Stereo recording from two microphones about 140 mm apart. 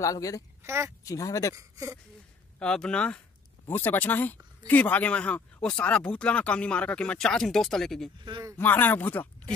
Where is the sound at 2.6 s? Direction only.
5° left (ahead or behind).